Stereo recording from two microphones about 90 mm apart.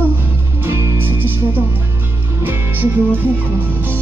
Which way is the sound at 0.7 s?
25° right (ahead or behind).